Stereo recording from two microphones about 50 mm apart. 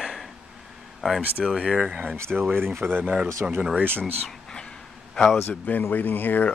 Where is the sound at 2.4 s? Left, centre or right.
Right.